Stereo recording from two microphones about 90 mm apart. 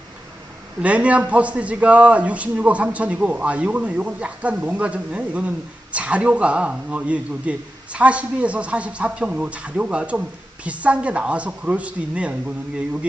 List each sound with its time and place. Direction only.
0.8 s a man's voice: 15° right (ahead or behind)